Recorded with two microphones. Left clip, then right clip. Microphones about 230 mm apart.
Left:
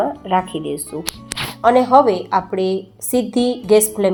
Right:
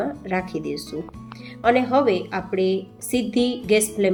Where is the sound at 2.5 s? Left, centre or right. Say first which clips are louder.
Left 2 dB; centre.